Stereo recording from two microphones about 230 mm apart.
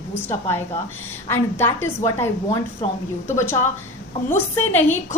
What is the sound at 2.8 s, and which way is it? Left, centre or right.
Speech, left.